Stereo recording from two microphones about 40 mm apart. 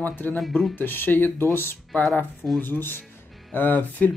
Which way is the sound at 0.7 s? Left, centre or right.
Left.